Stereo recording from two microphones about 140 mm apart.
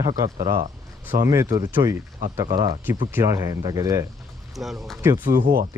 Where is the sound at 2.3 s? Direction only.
30° right (ahead or behind).